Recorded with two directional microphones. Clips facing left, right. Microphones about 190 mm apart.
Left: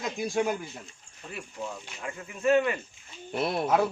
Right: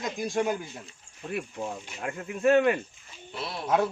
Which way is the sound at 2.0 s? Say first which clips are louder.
Right 3 dB; 55° right (ahead or behind).